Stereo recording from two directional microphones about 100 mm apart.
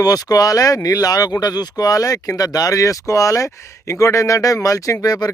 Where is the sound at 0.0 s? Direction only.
40° left (ahead or behind).